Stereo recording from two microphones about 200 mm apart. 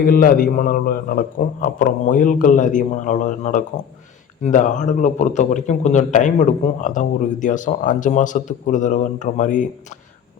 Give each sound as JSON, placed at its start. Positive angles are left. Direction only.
{"t": 0.0, "sound": "a man's voice", "side_deg": 45}